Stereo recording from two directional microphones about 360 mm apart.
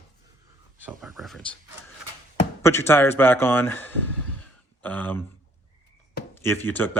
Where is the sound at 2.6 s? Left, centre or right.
Centre.